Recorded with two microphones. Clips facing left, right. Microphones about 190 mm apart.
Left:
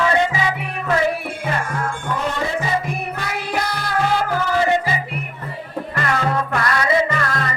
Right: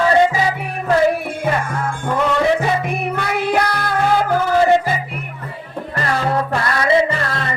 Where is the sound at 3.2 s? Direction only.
55° right (ahead or behind).